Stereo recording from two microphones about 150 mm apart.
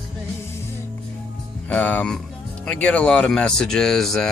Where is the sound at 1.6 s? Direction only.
10° left (ahead or behind).